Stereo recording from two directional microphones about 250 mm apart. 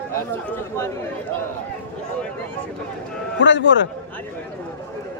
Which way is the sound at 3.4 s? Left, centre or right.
Left.